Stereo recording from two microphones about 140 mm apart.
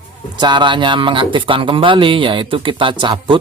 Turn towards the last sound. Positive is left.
turn(degrees=-35)  # may be behind; listen again after turning